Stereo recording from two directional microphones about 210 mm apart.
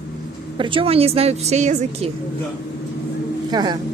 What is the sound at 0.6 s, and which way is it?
A woman's voice, 25° right (ahead or behind).